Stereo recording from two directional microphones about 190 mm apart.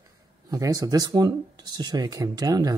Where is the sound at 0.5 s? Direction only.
20° right (ahead or behind).